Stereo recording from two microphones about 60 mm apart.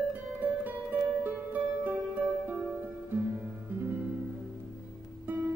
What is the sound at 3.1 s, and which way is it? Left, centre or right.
Music, right.